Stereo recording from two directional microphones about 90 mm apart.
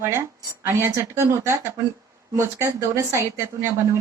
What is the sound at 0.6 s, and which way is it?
A woman's voice, 30° right (ahead or behind).